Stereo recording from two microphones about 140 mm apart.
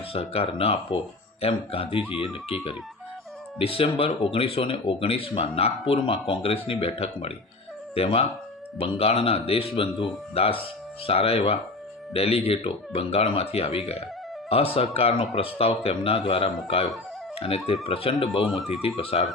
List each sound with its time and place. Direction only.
0.1 s speech: 45° left (ahead or behind)
3.6 s speech: 40° left (ahead or behind)
18.2 s speech: centre (ahead or behind)
18.9 s speech: 45° left (ahead or behind)